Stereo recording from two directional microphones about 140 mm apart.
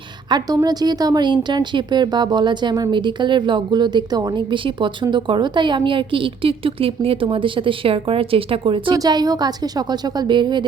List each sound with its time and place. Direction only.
0.3 s a woman's voice: 30° right (ahead or behind)